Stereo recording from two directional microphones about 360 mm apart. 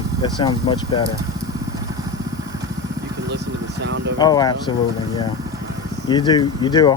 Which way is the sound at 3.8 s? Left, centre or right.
Right.